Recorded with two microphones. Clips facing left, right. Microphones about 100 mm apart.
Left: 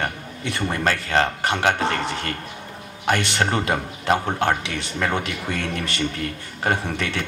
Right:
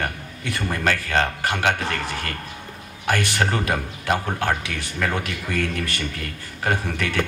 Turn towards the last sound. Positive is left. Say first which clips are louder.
# left 1 dB
turn(degrees=25)  # may be behind; listen again after turning